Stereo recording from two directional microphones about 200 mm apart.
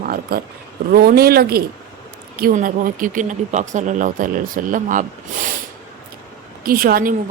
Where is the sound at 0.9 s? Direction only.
50° right (ahead or behind).